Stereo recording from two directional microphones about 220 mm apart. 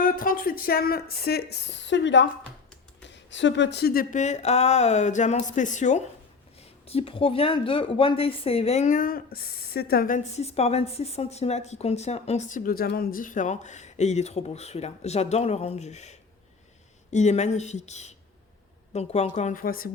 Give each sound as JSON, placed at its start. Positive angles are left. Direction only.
{"t": 0.0, "sound": "a woman's voice", "side_deg": 40}